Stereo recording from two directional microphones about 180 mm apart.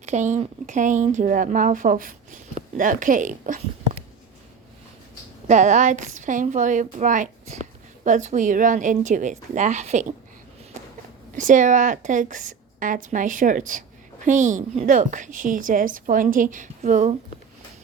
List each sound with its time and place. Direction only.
0.0 s a woman's voice: 40° right (ahead or behind)
5.5 s a woman's voice: 40° right (ahead or behind)
11.3 s a woman's voice: 45° right (ahead or behind)